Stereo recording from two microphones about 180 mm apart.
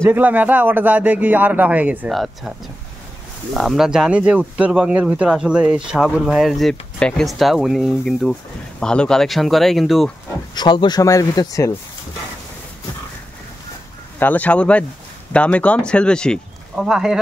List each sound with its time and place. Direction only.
0.0 s speech: 10° right (ahead or behind)
3.5 s speech: centre (ahead or behind)
10.5 s speech: 25° left (ahead or behind)
14.2 s speech: 10° left (ahead or behind)